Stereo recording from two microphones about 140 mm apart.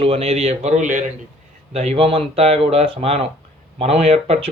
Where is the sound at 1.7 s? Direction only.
50° right (ahead or behind).